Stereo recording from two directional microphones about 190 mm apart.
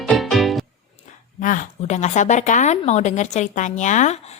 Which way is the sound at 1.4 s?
45° left (ahead or behind).